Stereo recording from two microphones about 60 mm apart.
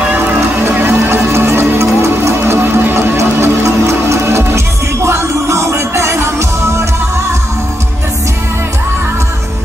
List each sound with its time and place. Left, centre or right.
0.7 s music: right